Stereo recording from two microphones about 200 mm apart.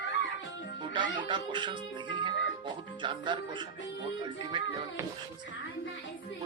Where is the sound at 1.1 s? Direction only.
25° right (ahead or behind).